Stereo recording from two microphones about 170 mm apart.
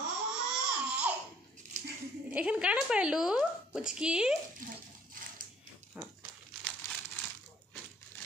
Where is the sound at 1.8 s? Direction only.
45° right (ahead or behind).